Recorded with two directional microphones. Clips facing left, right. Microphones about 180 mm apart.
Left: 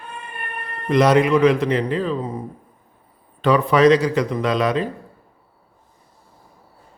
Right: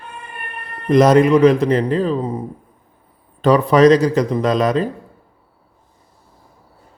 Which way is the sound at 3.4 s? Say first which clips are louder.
Right 3 dB; 40° right (ahead or behind).